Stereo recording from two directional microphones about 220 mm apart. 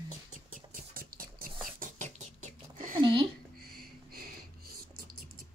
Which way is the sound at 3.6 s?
45° right (ahead or behind).